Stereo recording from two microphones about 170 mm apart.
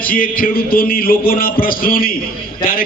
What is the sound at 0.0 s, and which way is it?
A man's voice, 60° left (ahead or behind).